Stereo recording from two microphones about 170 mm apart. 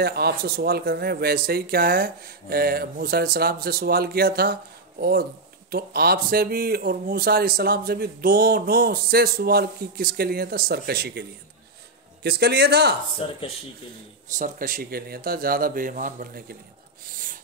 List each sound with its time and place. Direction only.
0.0 s a man's voice: 65° right (ahead or behind)
13.2 s speech: 30° left (ahead or behind)
14.3 s speech: 50° right (ahead or behind)
17.0 s a sound: 55° right (ahead or behind)